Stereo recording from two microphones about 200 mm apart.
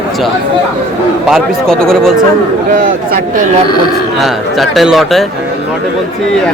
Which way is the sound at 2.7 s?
40° right (ahead or behind).